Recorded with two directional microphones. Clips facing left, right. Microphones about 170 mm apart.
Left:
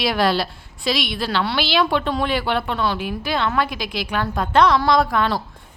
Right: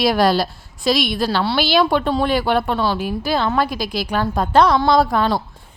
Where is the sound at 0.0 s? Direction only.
40° right (ahead or behind).